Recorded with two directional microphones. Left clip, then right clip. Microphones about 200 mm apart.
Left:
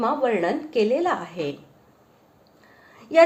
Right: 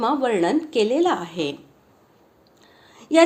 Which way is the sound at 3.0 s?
35° right (ahead or behind).